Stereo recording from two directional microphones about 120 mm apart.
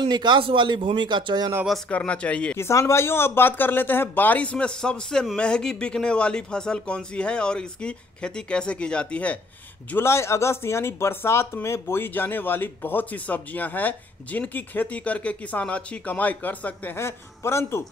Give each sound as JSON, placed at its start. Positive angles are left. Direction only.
{"t": 0.0, "sound": "speech", "side_deg": -40}
{"t": 1.9, "sound": "speech", "side_deg": 10}
{"t": 2.5, "sound": "speech", "side_deg": 25}